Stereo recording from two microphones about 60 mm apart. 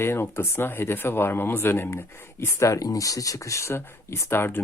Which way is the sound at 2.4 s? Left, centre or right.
Left.